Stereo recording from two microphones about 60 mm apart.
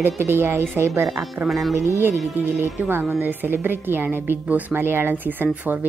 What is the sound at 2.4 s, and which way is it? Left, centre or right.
Speech, right.